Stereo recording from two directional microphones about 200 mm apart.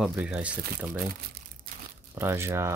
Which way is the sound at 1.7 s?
45° right (ahead or behind).